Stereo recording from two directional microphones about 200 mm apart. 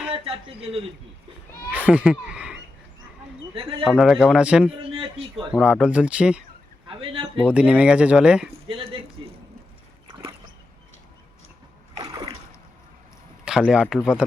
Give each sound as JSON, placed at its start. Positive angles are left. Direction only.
{"t": 0.1, "sound": "a man's voice", "side_deg": -30}
{"t": 1.7, "sound": "speech", "side_deg": -5}
{"t": 3.5, "sound": "a man's voice", "side_deg": -25}
{"t": 3.8, "sound": "speech", "side_deg": 0}
{"t": 4.8, "sound": "speech", "side_deg": -25}
{"t": 5.5, "sound": "speech", "side_deg": -5}
{"t": 6.8, "sound": "a sound", "side_deg": -25}
{"t": 7.4, "sound": "speech", "side_deg": -5}
{"t": 8.6, "sound": "a sound", "side_deg": -25}
{"t": 11.9, "sound": "splash", "side_deg": -25}
{"t": 13.7, "sound": "speech", "side_deg": -5}